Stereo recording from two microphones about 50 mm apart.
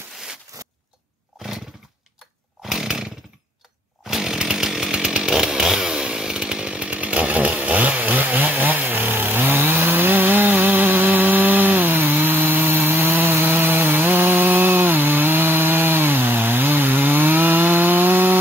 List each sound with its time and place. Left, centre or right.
0.5 s a sound: right
2.6 s chainsaw: centre
4.1 s chainsaw: centre; by 18.4 s right